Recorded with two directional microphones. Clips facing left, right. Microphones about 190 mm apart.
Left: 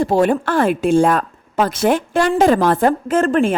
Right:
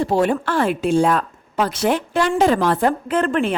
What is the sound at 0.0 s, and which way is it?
A woman's voice, 45° left (ahead or behind).